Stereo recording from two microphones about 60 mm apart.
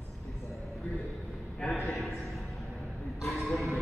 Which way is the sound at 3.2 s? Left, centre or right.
Centre.